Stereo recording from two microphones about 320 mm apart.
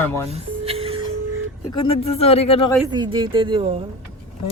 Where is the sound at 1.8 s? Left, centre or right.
Centre.